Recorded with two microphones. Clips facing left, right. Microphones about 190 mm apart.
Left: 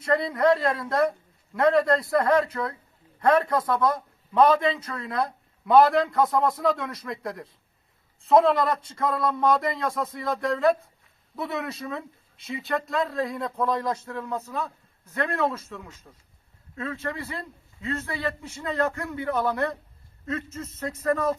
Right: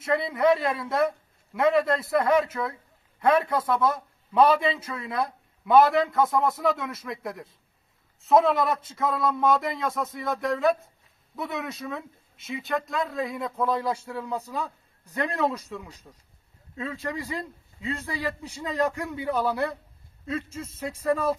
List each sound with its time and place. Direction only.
0.0 s a man's voice: centre (ahead or behind)